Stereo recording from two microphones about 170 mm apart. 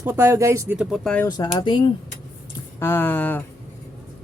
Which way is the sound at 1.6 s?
30° left (ahead or behind).